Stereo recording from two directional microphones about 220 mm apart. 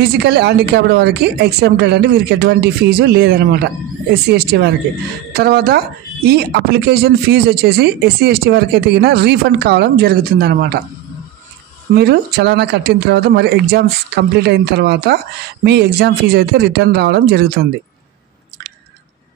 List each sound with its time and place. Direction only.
0.0 s speech: 50° right (ahead or behind)
11.9 s speech: 45° right (ahead or behind)